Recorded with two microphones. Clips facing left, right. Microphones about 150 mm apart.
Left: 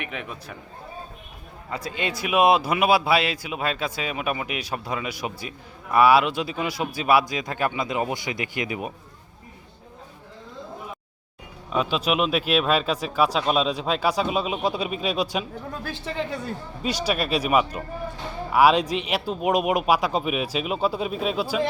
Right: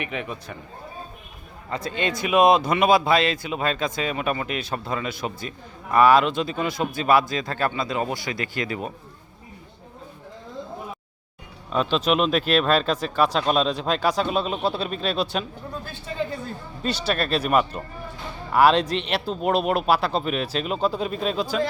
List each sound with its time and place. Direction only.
0.0 s a man's voice: centre (ahead or behind)
1.7 s speech: 5° left (ahead or behind)
11.7 s speech: 5° left (ahead or behind)
15.8 s speech: 90° left
16.8 s speech: 10° left (ahead or behind)